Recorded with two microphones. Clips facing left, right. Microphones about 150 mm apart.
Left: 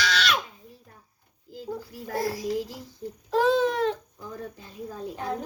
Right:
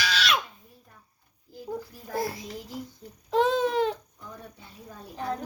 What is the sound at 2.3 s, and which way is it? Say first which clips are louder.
Speech: left 10 dB; 85° left.